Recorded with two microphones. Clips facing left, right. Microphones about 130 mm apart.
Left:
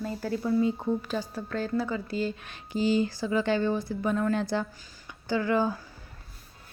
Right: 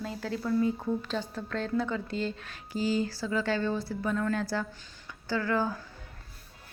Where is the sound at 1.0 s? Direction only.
10° left (ahead or behind).